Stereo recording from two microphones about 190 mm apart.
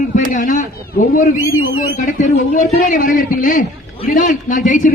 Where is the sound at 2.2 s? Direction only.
45° left (ahead or behind).